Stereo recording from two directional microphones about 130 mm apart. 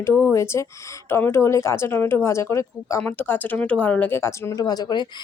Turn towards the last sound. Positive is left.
turn(degrees=30)  # may be behind; listen again after turning